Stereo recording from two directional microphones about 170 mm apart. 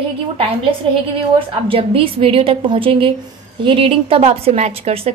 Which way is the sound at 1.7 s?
35° right (ahead or behind).